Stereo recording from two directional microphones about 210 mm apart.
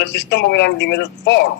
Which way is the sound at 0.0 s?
55° left (ahead or behind).